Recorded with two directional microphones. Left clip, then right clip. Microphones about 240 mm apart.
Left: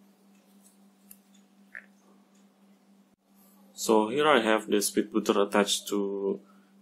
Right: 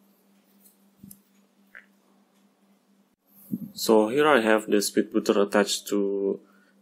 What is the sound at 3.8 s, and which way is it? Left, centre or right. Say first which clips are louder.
Speech: right 4 dB; right.